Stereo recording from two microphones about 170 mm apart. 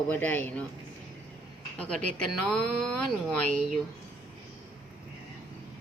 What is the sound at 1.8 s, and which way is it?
Speech, 5° left (ahead or behind).